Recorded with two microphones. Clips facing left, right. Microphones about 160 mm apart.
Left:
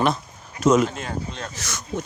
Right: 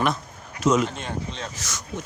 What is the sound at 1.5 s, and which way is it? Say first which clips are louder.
Speech: left 2 dB; 65° left (ahead or behind).